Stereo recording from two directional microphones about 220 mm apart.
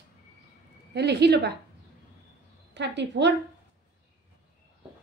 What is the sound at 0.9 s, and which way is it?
Speech, 50° right (ahead or behind).